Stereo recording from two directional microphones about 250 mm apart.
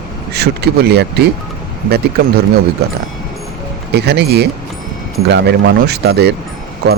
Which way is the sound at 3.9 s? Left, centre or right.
Right.